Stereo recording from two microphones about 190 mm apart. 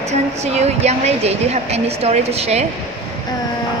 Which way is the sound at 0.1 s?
35° right (ahead or behind).